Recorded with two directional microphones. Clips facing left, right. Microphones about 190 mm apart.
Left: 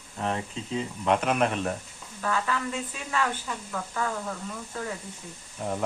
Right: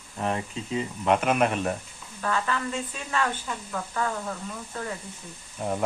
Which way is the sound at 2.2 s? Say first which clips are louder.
Right 1 dB; 5° left (ahead or behind).